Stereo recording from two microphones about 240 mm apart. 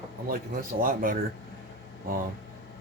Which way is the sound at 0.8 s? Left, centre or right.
Right.